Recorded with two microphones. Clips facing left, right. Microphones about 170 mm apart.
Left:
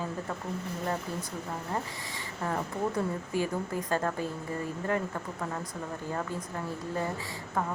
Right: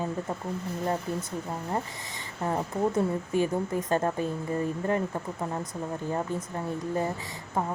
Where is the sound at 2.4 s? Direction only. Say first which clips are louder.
Right 4 dB; 20° right (ahead or behind).